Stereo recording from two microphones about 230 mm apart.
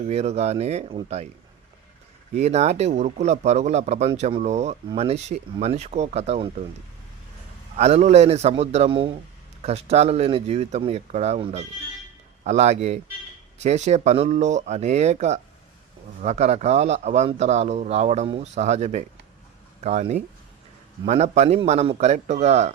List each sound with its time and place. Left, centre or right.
0.1 s a man's voice: right
2.3 s a man's voice: right
7.8 s a man's voice: right